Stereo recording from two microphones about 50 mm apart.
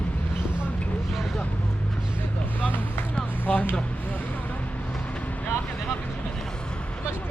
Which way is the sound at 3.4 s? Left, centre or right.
Left.